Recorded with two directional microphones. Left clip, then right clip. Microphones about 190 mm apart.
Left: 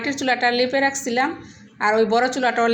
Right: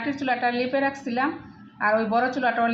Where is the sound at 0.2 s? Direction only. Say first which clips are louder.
Left 6 dB; 20° left (ahead or behind).